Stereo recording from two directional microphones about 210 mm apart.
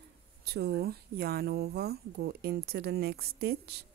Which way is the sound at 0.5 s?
50° right (ahead or behind).